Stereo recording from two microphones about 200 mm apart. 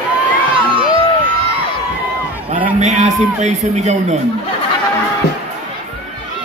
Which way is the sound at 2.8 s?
35° right (ahead or behind).